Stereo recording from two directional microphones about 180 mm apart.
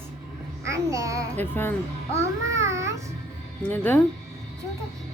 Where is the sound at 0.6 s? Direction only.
15° right (ahead or behind).